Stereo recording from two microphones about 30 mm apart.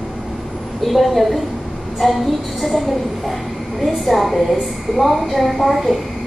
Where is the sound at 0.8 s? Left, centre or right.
Centre.